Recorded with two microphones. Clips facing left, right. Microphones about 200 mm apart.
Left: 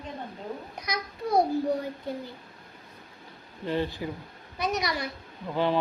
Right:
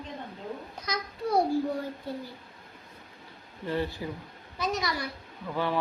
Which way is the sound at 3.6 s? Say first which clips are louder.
Left 2 dB; 20° left (ahead or behind).